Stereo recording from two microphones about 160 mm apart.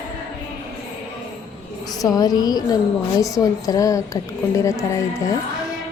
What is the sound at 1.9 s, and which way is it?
A woman's voice, 25° left (ahead or behind).